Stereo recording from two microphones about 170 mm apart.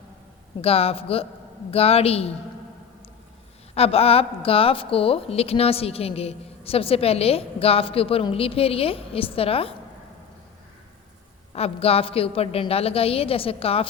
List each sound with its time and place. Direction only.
0.6 s a woman's voice: 35° left (ahead or behind)
3.8 s a woman's voice: 35° left (ahead or behind)
11.5 s a woman's voice: 35° left (ahead or behind)